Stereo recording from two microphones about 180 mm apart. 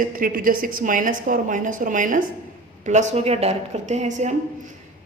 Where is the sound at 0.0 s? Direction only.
50° right (ahead or behind).